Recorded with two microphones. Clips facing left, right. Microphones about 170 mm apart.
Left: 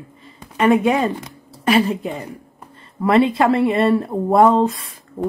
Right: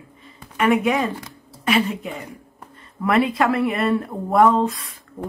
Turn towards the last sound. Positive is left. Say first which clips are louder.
# left 8 dB
turn(degrees=30)  # may be behind; listen again after turning